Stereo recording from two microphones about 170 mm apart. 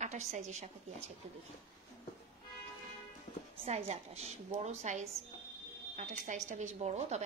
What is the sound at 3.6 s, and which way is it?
A woman's voice, 40° right (ahead or behind).